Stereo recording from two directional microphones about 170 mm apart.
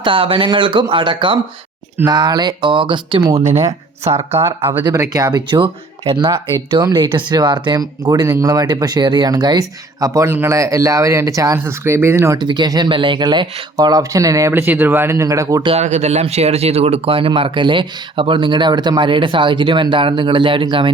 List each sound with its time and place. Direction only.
0.0 s speech: 30° right (ahead or behind)
4.3 s speech: 15° right (ahead or behind)
15.7 s speech: 40° right (ahead or behind)